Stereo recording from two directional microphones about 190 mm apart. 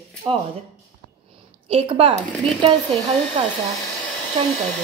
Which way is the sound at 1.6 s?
30° right (ahead or behind).